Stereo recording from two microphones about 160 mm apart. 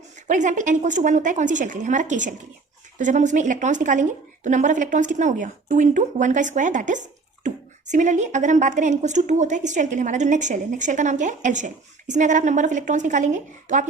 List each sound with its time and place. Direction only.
0.3 s a woman's voice: 50° right (ahead or behind)